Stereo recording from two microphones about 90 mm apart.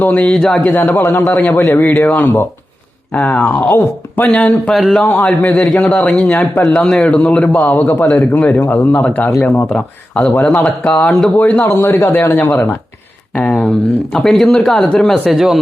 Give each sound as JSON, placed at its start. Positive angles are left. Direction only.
{"t": 0.0, "sound": "a man's voice", "side_deg": 20}
{"t": 13.3, "sound": "a man's voice", "side_deg": 10}